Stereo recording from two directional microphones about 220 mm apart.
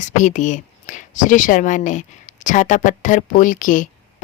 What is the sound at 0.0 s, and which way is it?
Speech, 35° left (ahead or behind).